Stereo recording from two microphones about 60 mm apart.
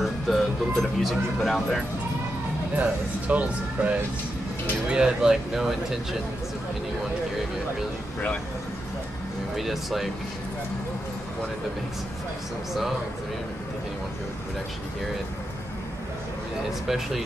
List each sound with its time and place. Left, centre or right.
0.0 s speech: centre
2.7 s speech: right; by 5.9 s centre
9.6 s speech: centre
16.8 s speech: centre